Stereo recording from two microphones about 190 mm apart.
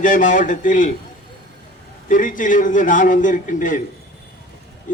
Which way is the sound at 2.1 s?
45° left (ahead or behind).